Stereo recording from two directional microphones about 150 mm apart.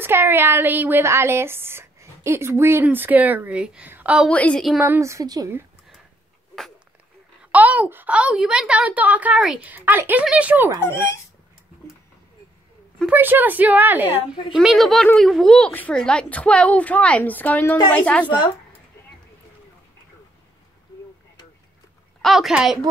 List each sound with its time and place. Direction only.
0.0 s speech: 15° right (ahead or behind)
4.3 s a woman's voice: 10° left (ahead or behind)
4.7 s a woman's voice: 15° right (ahead or behind)
7.5 s speech: 10° right (ahead or behind)
13.0 s a woman's voice: 10° right (ahead or behind); by 18.2 s 10° left (ahead or behind)
18.2 s speech: 30° left (ahead or behind)
22.2 s speech: centre (ahead or behind)